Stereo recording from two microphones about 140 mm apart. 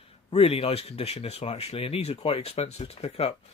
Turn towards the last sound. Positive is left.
turn(degrees=45)  # may be behind; listen again after turning